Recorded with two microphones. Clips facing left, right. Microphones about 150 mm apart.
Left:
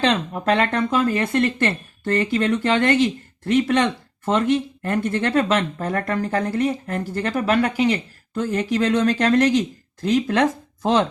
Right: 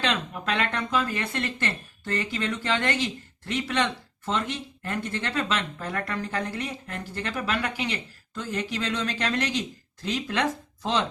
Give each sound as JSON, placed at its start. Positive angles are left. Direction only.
{"t": 0.0, "sound": "speech", "side_deg": 40}